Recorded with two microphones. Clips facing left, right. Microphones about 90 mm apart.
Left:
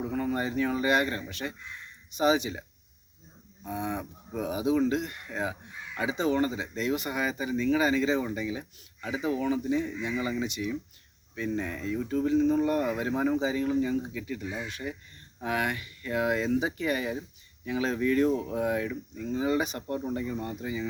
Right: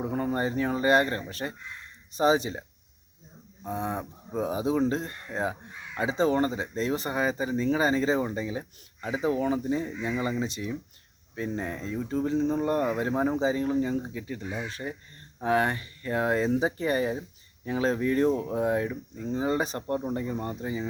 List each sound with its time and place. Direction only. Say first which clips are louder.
0.0 s speech: right 2 dB; 35° right (ahead or behind)